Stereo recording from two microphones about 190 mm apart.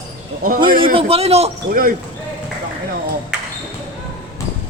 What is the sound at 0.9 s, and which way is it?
Speech, 30° right (ahead or behind).